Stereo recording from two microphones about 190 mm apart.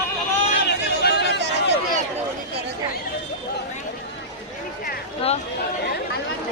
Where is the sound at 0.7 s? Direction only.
60° left (ahead or behind).